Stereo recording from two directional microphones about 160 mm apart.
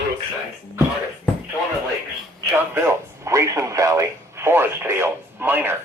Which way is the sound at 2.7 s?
15° right (ahead or behind).